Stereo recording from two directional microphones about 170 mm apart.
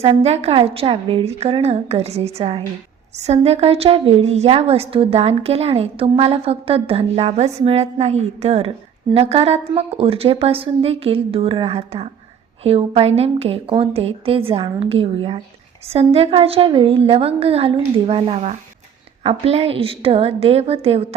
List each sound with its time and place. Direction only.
0.0 s a woman's voice: 35° right (ahead or behind)